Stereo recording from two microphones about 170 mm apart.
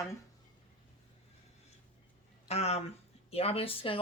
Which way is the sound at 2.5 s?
40° left (ahead or behind).